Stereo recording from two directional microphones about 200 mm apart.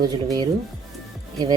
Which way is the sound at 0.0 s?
20° right (ahead or behind).